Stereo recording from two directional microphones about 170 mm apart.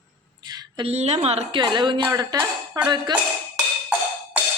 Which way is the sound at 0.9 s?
35° right (ahead or behind).